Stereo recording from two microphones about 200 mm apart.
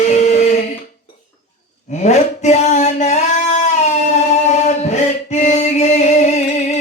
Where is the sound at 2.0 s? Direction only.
35° left (ahead or behind).